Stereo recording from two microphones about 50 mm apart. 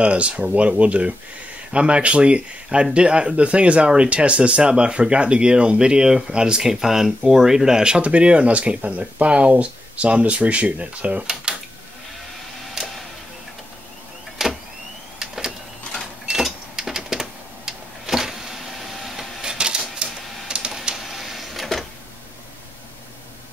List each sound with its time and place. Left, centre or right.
0.0 s speech: right
12.7 s music: centre
14.4 s vehicle: centre
16.3 s a sound: centre
19.4 s typewriter: centre
20.7 s printer: centre